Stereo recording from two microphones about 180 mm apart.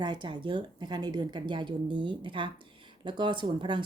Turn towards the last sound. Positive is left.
turn(degrees=-25)  # may be behind; listen again after turning